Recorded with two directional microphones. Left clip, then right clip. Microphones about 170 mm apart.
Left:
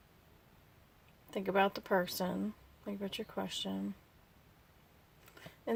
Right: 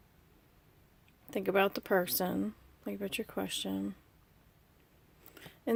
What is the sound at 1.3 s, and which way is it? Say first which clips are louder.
Speech: right 2 dB; 50° right (ahead or behind).